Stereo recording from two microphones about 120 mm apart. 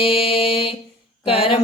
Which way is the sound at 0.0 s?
50° left (ahead or behind).